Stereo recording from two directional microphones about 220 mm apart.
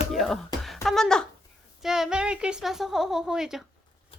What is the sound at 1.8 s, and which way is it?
A woman's voice, centre (ahead or behind).